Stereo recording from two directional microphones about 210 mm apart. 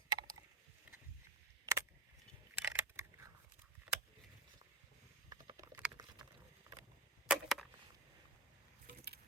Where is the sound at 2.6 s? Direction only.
10° right (ahead or behind).